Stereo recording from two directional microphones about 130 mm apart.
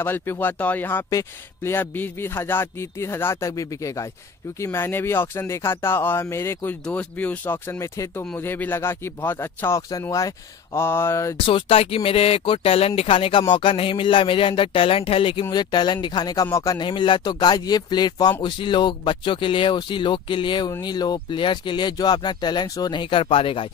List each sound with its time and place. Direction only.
0.0 s speech: 15° left (ahead or behind)
11.3 s speech: 45° left (ahead or behind)
15.5 s speech: 35° left (ahead or behind)